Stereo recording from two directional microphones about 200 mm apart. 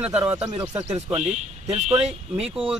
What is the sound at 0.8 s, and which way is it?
Speech, 35° right (ahead or behind).